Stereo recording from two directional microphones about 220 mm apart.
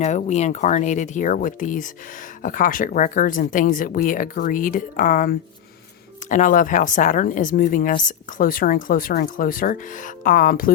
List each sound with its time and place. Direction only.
0.0 s a woman's voice: 30° left (ahead or behind)